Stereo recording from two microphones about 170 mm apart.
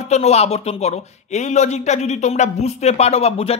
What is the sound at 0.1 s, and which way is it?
A man's voice, 40° left (ahead or behind).